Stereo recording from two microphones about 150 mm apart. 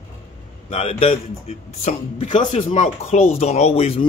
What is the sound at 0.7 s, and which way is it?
A man's voice, 40° left (ahead or behind).